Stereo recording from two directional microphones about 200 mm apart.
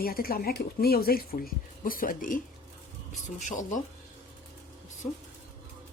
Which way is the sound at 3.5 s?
40° left (ahead or behind).